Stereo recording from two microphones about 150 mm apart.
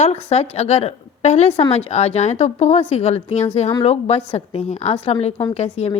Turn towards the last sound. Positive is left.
turn(degrees=45)  # may be behind; listen again after turning